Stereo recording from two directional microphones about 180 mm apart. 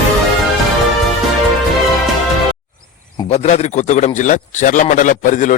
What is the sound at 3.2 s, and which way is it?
Speech, 35° left (ahead or behind).